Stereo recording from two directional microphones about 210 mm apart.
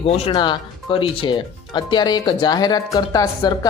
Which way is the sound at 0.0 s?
30° left (ahead or behind).